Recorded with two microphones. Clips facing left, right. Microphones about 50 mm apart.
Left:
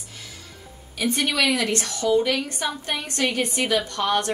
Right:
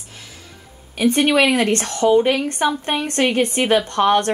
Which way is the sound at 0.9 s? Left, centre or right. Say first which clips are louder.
Right 8 dB; right.